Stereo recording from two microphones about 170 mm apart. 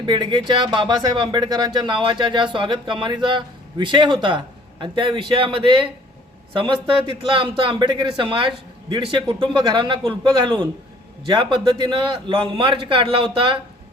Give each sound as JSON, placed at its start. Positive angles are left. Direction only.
{"t": 0.0, "sound": "a man's voice", "side_deg": -25}